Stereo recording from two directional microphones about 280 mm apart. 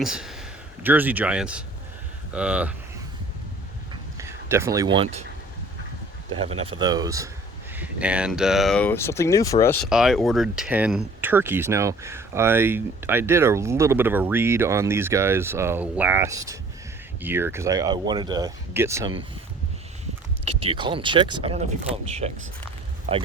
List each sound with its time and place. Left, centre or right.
0.0 s speech: centre
4.2 s speech: centre
6.4 s speech: right
20.7 s speech: centre